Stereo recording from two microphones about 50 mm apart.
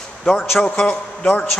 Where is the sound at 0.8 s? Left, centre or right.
Left.